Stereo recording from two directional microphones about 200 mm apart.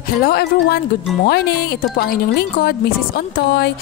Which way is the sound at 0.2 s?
50° left (ahead or behind).